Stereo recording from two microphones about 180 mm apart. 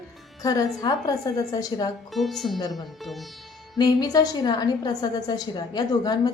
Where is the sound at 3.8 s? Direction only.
20° left (ahead or behind).